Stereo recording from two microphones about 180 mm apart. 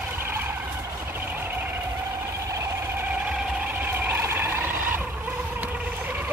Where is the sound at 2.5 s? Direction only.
15° right (ahead or behind).